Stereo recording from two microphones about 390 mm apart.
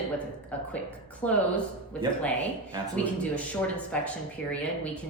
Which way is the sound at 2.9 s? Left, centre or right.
Centre.